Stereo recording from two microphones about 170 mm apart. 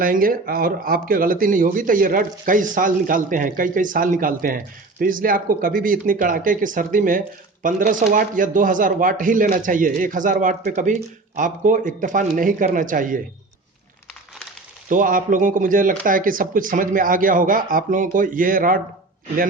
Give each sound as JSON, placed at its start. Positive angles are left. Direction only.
{"t": 0.0, "sound": "speech", "side_deg": -55}
{"t": 14.8, "sound": "speech", "side_deg": -50}